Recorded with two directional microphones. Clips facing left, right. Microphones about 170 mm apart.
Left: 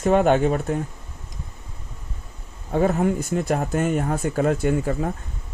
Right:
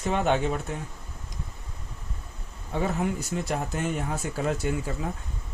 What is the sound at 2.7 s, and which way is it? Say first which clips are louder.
Speech: left 7 dB; 50° left (ahead or behind).